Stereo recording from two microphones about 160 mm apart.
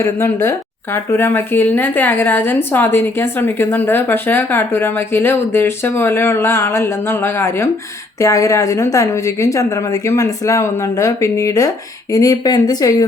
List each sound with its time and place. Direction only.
0.0 s a woman's voice: 15° left (ahead or behind)